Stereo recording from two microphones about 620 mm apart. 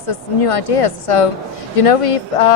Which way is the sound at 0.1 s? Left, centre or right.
Left.